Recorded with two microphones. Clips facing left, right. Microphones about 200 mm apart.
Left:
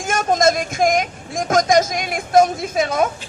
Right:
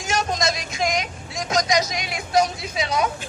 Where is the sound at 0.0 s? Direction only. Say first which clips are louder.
Left 7 dB; 50° left (ahead or behind).